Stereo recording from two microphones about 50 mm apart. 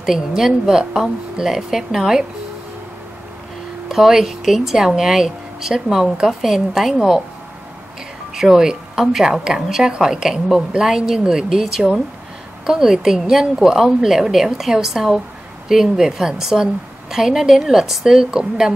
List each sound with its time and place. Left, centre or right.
0.0 s a woman's voice: centre
3.9 s a woman's voice: centre
8.4 s a woman's voice: centre